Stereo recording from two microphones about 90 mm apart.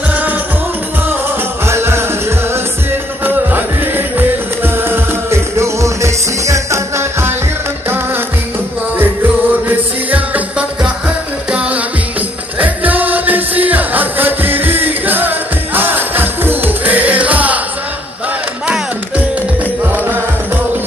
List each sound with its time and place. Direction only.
0.1 s music: 20° right (ahead or behind)
1.7 s music: 30° right (ahead or behind)
9.7 s music: 15° right (ahead or behind)